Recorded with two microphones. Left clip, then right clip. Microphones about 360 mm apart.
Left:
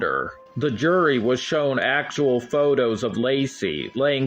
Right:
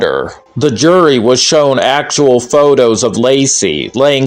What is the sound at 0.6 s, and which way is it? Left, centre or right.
Speech, left.